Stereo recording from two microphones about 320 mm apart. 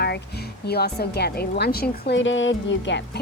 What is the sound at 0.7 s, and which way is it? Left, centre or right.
A woman's voice, left.